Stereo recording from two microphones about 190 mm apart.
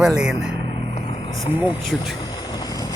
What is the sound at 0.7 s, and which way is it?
Vehicle, 35° left (ahead or behind).